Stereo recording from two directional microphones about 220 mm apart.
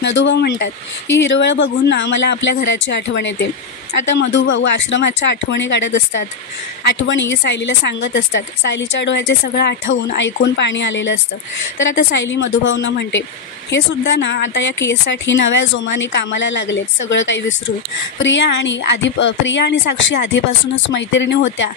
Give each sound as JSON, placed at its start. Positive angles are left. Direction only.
{"t": 0.0, "sound": "a woman's voice", "side_deg": 55}